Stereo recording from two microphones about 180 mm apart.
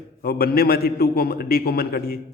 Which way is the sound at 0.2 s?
55° left (ahead or behind).